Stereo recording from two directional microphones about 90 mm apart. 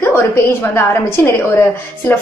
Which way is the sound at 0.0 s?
25° left (ahead or behind).